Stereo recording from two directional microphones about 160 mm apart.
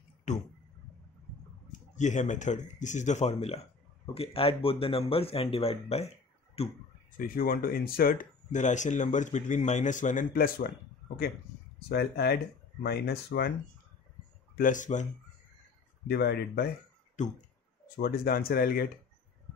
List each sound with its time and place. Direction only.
0.3 s speech: 45° left (ahead or behind)
1.7 s speech: 50° left (ahead or behind)
7.1 s speech: 60° left (ahead or behind)
11.9 s speech: 80° left
12.8 s speech: 90° left
14.6 s speech: 50° left (ahead or behind)
16.1 s speech: 85° left
17.2 s speech: 50° left (ahead or behind)
17.9 s speech: 70° left (ahead or behind)